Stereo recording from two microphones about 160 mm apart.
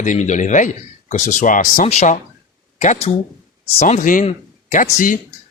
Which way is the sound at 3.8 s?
55° left (ahead or behind).